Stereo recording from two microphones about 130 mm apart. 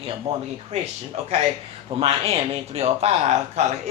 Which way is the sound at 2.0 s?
50° right (ahead or behind).